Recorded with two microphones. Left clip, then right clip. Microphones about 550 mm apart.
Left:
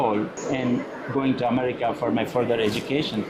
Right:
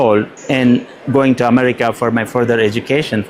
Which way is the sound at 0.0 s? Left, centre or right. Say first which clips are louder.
Right 11 dB; right.